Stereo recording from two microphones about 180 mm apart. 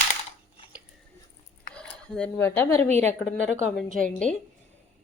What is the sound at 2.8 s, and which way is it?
Speech, 40° right (ahead or behind).